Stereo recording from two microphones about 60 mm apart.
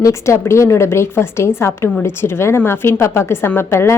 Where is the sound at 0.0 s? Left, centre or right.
Left.